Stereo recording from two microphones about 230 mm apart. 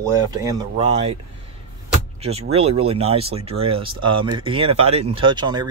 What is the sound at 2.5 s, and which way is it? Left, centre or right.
Speech, right.